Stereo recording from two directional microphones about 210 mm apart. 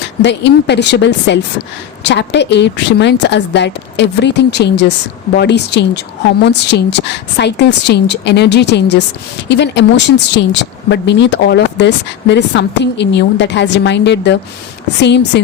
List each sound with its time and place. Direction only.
0.2 s a woman's voice: 55° left (ahead or behind)